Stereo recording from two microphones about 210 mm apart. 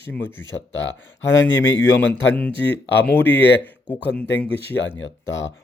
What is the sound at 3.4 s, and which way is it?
Speech, 55° left (ahead or behind).